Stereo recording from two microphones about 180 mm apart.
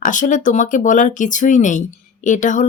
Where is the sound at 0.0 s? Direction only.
45° left (ahead or behind).